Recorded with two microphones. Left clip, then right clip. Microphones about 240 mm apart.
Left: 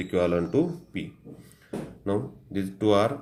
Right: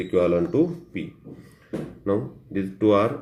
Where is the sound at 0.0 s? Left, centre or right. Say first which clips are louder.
Right 4 dB; left.